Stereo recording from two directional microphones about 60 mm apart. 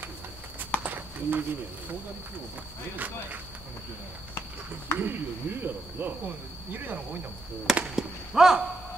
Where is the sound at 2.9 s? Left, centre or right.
Right.